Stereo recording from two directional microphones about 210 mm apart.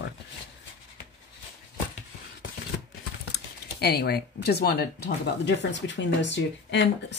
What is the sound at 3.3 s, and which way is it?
Speech, 50° left (ahead or behind).